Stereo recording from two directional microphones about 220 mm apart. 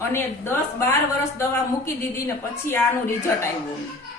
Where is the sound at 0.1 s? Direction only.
10° left (ahead or behind).